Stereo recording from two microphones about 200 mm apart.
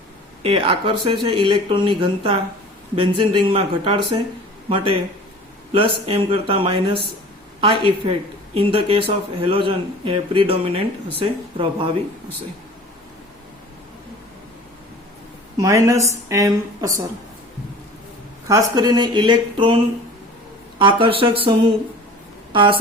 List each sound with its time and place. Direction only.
0.4 s speech: 25° right (ahead or behind)
15.5 s a woman's voice: 15° right (ahead or behind)
18.4 s speech: 15° right (ahead or behind)